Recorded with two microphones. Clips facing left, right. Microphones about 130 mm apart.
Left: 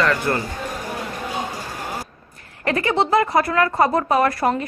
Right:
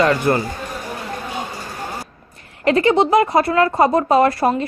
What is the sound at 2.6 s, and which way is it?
Speech, 20° right (ahead or behind).